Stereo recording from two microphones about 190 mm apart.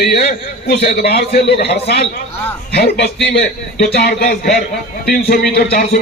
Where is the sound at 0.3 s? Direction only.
60° left (ahead or behind).